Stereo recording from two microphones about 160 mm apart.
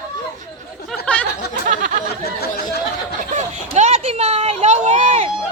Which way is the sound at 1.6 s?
50° right (ahead or behind).